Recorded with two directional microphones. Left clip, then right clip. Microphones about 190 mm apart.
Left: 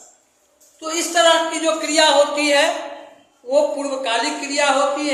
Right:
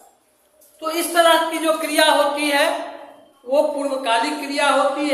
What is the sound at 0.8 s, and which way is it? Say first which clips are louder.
A man's voice: even; 10° left (ahead or behind).